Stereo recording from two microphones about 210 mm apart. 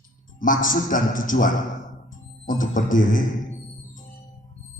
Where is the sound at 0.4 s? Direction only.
40° left (ahead or behind).